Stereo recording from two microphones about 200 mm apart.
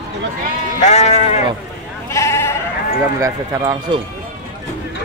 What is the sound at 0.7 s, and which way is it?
Speech, 35° left (ahead or behind).